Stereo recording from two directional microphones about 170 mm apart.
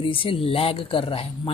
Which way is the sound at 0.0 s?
30° left (ahead or behind).